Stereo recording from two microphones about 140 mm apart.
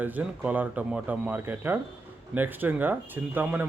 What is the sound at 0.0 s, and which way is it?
A man's voice, 10° right (ahead or behind).